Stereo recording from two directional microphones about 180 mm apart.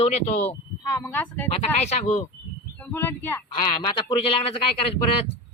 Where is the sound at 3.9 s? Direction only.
30° left (ahead or behind).